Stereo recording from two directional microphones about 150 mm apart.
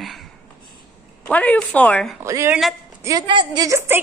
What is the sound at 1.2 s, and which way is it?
Speech, 10° left (ahead or behind).